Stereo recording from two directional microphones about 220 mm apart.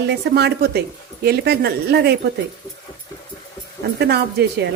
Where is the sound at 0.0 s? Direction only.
50° right (ahead or behind).